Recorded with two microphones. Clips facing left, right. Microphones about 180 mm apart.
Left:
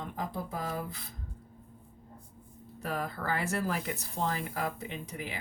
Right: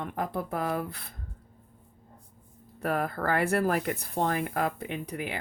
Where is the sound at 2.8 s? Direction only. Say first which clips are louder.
Right 6 dB; 60° right (ahead or behind).